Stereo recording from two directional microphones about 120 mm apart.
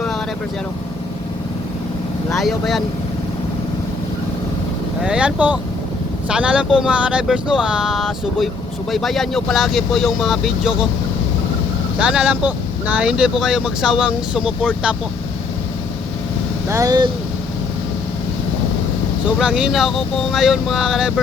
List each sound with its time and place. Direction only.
2.3 s speech: centre (ahead or behind)
5.0 s speech: 10° right (ahead or behind)
11.9 s speech: 10° right (ahead or behind)
16.6 s speech: 25° right (ahead or behind)
19.4 s speech: 5° right (ahead or behind)